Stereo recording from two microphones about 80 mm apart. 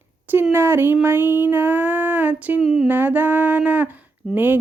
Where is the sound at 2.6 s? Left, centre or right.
Centre.